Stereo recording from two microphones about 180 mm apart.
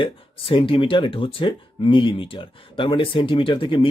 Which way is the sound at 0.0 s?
30° left (ahead or behind).